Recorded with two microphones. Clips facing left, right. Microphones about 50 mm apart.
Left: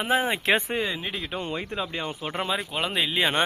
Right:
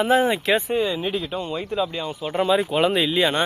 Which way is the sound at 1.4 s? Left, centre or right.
Left.